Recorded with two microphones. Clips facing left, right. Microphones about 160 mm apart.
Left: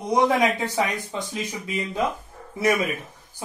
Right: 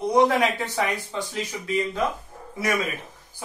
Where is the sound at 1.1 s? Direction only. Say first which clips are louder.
Even; 20° left (ahead or behind).